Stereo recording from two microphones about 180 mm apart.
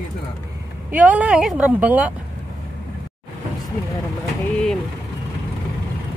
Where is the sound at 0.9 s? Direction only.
10° right (ahead or behind).